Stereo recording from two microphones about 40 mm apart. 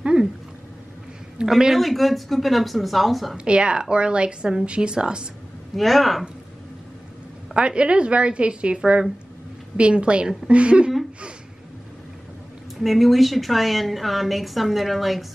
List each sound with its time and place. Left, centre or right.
1.4 s a woman's voice: centre
1.8 s a woman's voice: centre
3.3 s a woman's voice: right
5.8 s a woman's voice: centre
7.5 s a woman's voice: right
12.8 s a woman's voice: centre